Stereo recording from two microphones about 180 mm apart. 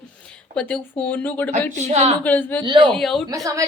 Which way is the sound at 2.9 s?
5° left (ahead or behind).